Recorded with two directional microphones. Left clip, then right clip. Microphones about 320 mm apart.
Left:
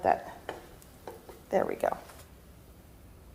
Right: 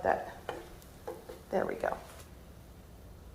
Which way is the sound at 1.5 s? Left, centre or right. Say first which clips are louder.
Left 4 dB; left.